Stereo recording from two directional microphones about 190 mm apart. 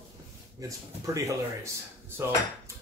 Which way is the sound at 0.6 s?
15° right (ahead or behind).